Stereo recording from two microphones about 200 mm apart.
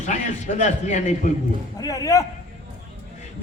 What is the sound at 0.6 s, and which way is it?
Speech, 35° left (ahead or behind).